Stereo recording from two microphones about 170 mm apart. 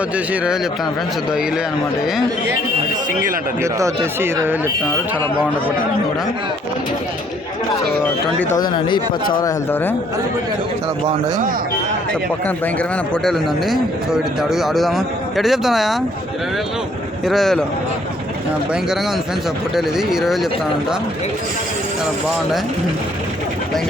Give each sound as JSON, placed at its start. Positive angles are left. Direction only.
{"t": 3.6, "sound": "speech", "side_deg": -15}
{"t": 8.5, "sound": "a man's voice", "side_deg": 25}
{"t": 13.2, "sound": "a man's voice", "side_deg": 0}
{"t": 17.2, "sound": "a man's voice", "side_deg": 0}
{"t": 19.7, "sound": "a man's voice", "side_deg": 0}